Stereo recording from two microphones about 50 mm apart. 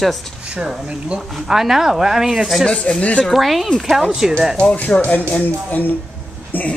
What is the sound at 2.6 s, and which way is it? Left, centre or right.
Speech, centre.